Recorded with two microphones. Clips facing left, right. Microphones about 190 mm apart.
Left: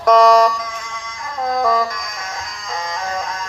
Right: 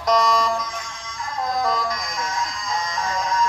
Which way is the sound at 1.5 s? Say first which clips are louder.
Left 6 dB; 55° left (ahead or behind).